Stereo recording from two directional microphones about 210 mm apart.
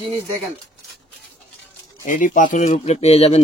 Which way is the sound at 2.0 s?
40° left (ahead or behind).